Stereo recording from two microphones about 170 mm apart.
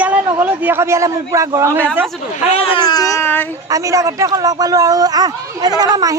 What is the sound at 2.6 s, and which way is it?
Baby cry, 30° left (ahead or behind).